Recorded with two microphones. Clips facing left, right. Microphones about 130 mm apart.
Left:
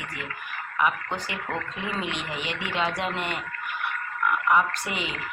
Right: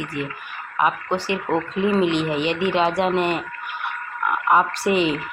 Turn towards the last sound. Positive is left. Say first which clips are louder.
# right 12 dB
turn(degrees=-30)  # may be behind; listen again after turning